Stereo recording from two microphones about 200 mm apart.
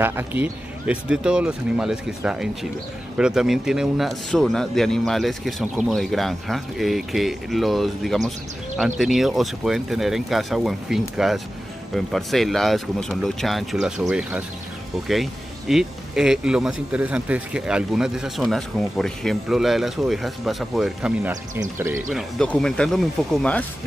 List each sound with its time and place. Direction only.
0.0 s speech: 10° right (ahead or behind)
15.7 s speech: centre (ahead or behind)
22.1 s speech: 5° left (ahead or behind)